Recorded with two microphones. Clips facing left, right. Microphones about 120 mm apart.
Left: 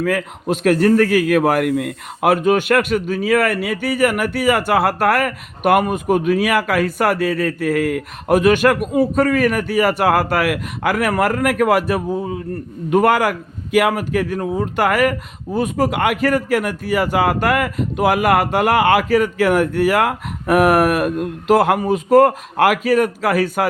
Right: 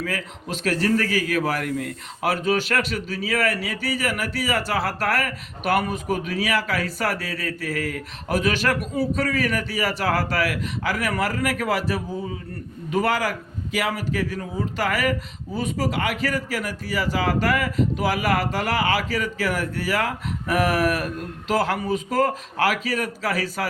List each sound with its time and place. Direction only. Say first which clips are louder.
0.0 s speech: left 10 dB; 55° left (ahead or behind)